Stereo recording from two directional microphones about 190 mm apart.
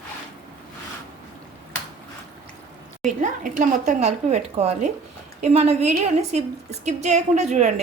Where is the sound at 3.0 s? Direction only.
40° right (ahead or behind).